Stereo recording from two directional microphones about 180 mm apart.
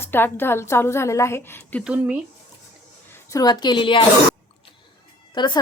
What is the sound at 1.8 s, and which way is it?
Speech, 5° right (ahead or behind).